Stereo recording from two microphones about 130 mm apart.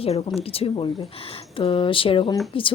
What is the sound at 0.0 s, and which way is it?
Speech, 50° left (ahead or behind).